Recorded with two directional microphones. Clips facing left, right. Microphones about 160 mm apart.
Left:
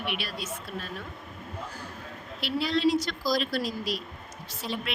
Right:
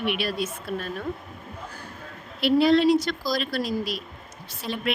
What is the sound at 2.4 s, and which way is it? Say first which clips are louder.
A woman's voice: right 9 dB; 60° right (ahead or behind).